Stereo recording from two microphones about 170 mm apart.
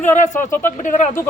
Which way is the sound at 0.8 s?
50° left (ahead or behind).